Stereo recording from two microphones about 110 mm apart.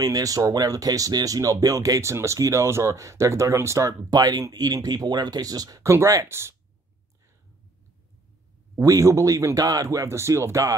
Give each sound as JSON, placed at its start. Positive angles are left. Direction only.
{"t": 0.0, "sound": "speech", "side_deg": -30}
{"t": 8.7, "sound": "speech", "side_deg": -30}